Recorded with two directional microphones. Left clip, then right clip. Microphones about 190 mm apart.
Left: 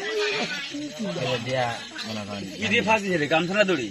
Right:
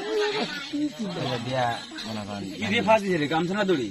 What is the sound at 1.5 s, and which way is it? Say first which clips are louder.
Speech: right 2 dB; centre (ahead or behind).